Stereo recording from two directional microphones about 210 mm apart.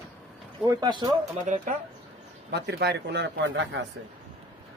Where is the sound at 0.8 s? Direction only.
20° right (ahead or behind).